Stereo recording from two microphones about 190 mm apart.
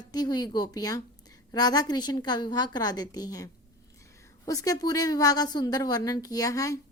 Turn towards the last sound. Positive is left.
turn(degrees=15)  # may be behind; listen again after turning